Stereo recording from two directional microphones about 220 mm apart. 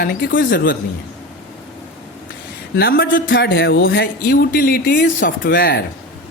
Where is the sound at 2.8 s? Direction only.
45° left (ahead or behind).